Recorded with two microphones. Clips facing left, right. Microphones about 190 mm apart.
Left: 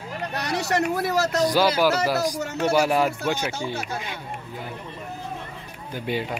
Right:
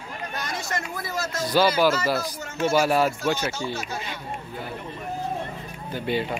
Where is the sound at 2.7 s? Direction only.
15° left (ahead or behind).